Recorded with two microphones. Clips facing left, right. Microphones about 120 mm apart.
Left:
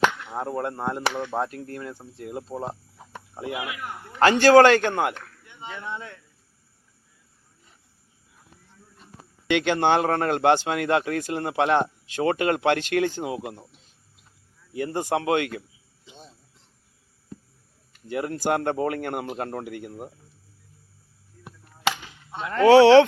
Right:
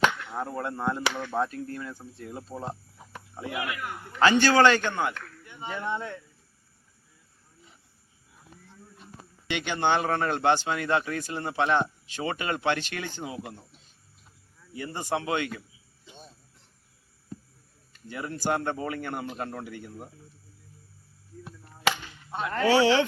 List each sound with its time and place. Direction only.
0.3 s speech: 30° left (ahead or behind)
0.9 s speech: 20° left (ahead or behind)
1.5 s a man's voice: 60° left (ahead or behind)
2.6 s speech: 20° left (ahead or behind)
4.2 s a man's voice: 55° left (ahead or behind)
5.5 s speech: 5° right (ahead or behind)
9.5 s speech: 85° left
9.8 s a man's voice: 50° left (ahead or behind)
14.9 s a man's voice: 65° left (ahead or behind)
18.1 s a man's voice: 65° left (ahead or behind)
19.4 s speech: 50° left (ahead or behind)
19.6 s speech: 65° left (ahead or behind)
22.5 s a man's voice: 65° left (ahead or behind)